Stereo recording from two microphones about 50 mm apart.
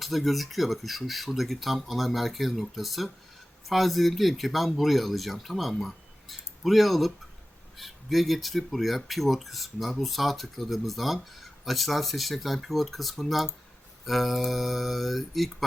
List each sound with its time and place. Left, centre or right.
0.0 s speech: centre